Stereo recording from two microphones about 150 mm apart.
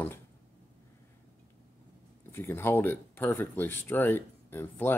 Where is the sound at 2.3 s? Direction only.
15° left (ahead or behind).